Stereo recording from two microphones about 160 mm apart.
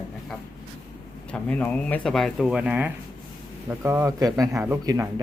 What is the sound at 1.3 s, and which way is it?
Speech, 10° left (ahead or behind).